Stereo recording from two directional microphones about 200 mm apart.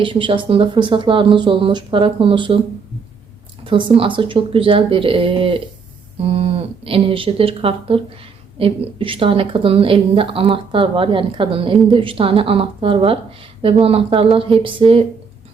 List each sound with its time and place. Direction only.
0.0 s a woman's voice: 25° right (ahead or behind)
3.6 s a woman's voice: 25° right (ahead or behind)